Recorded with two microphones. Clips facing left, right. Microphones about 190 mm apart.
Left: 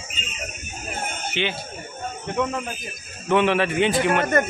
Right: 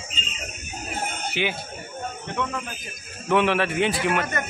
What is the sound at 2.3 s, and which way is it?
Speech, 20° left (ahead or behind).